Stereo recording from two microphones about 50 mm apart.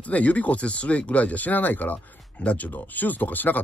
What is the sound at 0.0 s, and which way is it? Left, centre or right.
Speech, left.